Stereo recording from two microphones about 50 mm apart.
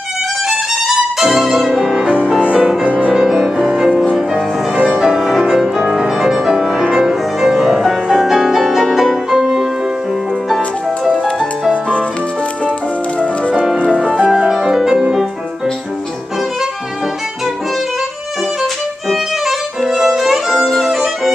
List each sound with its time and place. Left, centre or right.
0.5 s violin: centre
2.0 s music: centre
3.1 s music: centre
13.9 s music: centre
18.6 s violin: centre